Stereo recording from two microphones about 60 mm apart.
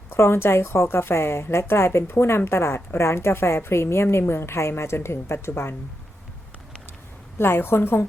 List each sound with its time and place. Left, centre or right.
0.1 s a woman's voice: left
7.3 s a woman's voice: left